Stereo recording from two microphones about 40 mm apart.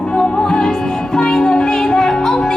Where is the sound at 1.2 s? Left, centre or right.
Centre.